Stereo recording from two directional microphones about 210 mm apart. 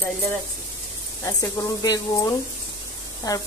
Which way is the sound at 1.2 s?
15° left (ahead or behind).